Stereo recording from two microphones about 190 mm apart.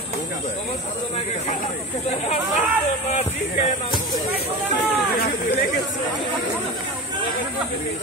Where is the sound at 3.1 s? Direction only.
40° left (ahead or behind).